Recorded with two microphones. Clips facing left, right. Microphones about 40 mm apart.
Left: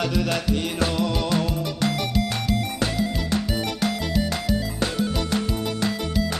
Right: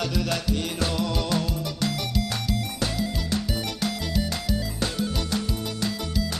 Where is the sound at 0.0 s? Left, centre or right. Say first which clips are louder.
Left 3 dB; left.